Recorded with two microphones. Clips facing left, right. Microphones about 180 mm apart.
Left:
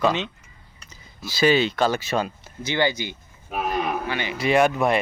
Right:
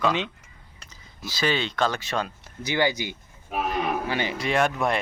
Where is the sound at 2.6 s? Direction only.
10° right (ahead or behind).